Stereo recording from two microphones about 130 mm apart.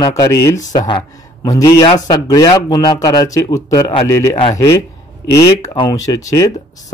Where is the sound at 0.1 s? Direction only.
25° left (ahead or behind).